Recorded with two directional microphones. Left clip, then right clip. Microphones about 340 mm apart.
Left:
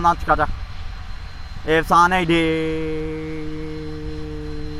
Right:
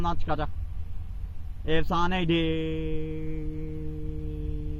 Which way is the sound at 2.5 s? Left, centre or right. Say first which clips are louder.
Left 9 dB; left.